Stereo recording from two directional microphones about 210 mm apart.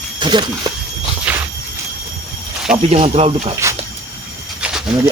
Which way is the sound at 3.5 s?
15° right (ahead or behind).